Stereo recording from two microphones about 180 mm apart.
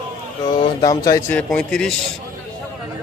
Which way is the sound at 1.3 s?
5° left (ahead or behind).